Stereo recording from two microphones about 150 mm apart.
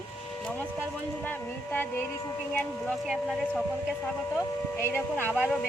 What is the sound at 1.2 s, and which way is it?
Speech, 15° left (ahead or behind).